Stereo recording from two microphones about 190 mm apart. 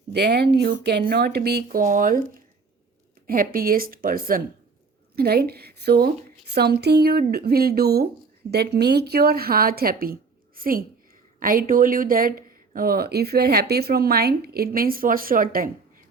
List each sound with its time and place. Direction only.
0.1 s a woman's voice: 60° right (ahead or behind)
1.8 s speech: 45° right (ahead or behind)
3.2 s a woman's voice: 50° right (ahead or behind)